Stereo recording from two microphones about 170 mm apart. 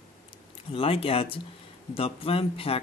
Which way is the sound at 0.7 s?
35° left (ahead or behind).